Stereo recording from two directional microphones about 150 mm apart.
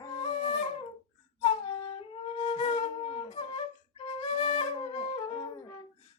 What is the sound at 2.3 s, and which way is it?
Flute, 40° left (ahead or behind).